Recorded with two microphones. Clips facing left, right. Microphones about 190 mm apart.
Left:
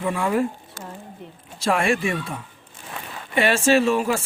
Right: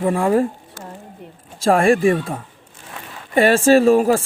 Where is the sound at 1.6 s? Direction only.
45° right (ahead or behind).